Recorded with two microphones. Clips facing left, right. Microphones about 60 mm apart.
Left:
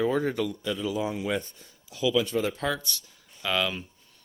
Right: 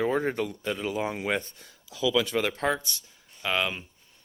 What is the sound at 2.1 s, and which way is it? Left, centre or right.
Speech, right.